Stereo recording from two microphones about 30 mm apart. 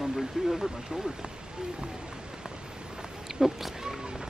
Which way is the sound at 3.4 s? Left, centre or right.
Right.